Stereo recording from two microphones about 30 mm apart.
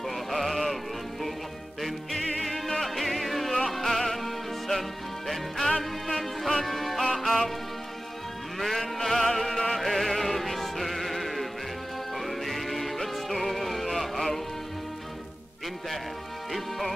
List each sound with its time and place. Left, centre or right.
0.3 s sheep: centre
1.8 s music: centre
5.6 s music: centre
8.5 s music: centre